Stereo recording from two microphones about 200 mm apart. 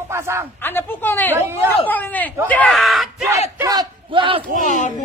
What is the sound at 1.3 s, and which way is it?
Speech, 10° right (ahead or behind).